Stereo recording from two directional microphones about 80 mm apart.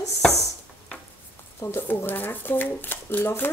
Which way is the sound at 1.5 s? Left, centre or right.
Left.